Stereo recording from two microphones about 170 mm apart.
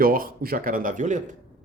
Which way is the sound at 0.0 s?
60° right (ahead or behind).